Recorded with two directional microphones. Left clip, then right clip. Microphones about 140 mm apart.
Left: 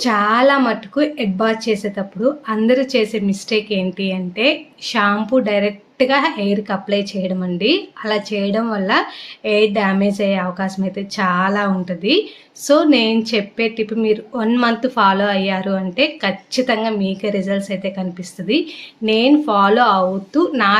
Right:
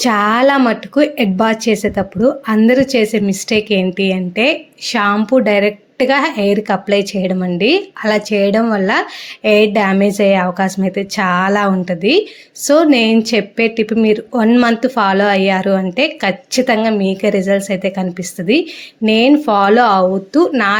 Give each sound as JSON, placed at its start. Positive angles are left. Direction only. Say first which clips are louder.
{"t": 0.0, "sound": "a woman's voice", "louder": "right 2 dB", "side_deg": -60}